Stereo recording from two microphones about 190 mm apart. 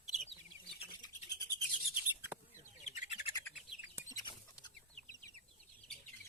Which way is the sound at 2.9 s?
40° left (ahead or behind).